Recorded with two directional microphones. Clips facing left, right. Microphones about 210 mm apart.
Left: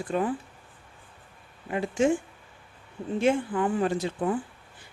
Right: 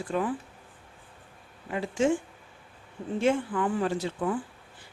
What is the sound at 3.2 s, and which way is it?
Speech, 15° left (ahead or behind).